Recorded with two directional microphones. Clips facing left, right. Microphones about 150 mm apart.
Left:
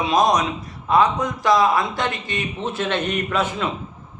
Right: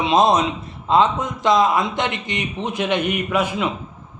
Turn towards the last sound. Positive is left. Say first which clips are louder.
# right 2 dB
turn(degrees=-10)  # may be behind; listen again after turning